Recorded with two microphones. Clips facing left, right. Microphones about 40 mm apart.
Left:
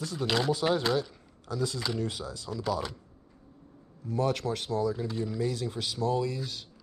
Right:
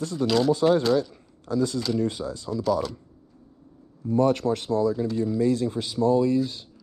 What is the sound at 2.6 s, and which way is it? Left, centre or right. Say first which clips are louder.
Speech: right 7 dB; centre.